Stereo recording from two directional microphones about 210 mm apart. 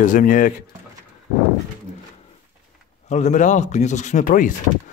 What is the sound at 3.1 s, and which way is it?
Speech, 35° left (ahead or behind).